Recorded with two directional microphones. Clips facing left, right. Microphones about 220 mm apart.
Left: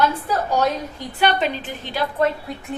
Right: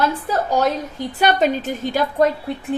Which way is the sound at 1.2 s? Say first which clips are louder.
Right 3 dB; 45° right (ahead or behind).